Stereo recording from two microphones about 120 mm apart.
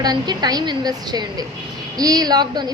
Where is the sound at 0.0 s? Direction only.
35° right (ahead or behind).